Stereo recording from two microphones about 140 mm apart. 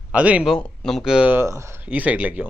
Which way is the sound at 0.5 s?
5° left (ahead or behind).